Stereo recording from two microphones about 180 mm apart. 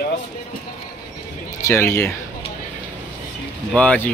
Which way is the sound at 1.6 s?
15° left (ahead or behind).